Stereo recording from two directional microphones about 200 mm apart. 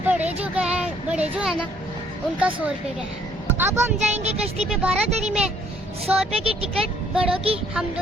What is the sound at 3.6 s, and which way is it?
Speech, 15° right (ahead or behind).